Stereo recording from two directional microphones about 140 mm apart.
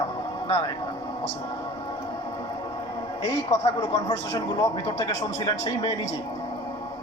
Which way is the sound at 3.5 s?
45° left (ahead or behind).